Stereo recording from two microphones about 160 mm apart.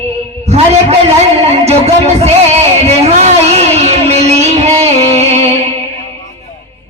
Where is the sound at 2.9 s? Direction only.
40° right (ahead or behind).